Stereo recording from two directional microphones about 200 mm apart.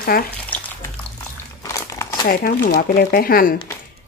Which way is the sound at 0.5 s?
5° left (ahead or behind).